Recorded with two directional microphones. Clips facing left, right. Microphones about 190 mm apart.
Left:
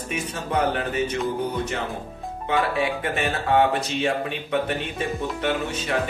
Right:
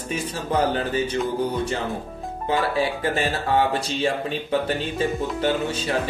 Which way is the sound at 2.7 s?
30° right (ahead or behind).